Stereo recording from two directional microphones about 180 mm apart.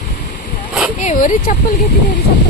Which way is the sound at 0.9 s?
45° left (ahead or behind).